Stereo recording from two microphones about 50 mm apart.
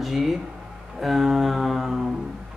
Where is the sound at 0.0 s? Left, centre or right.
Centre.